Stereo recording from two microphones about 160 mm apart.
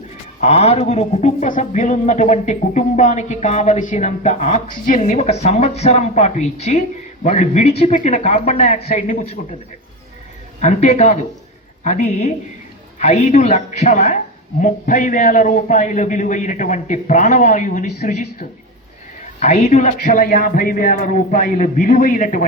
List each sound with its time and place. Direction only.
0.3 s speech: 40° left (ahead or behind)
10.6 s speech: 45° left (ahead or behind)
19.4 s a man's voice: 45° left (ahead or behind)